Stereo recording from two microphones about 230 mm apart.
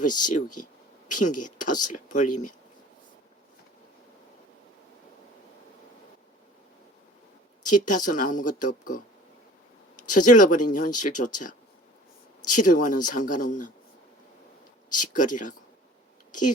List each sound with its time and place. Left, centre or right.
0.2 s a woman's voice: left
7.6 s a woman's voice: left
10.1 s a woman's voice: left
12.5 s a woman's voice: left
14.8 s a woman's voice: left